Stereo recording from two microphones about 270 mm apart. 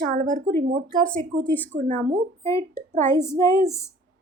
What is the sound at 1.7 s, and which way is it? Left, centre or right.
A woman's voice, right.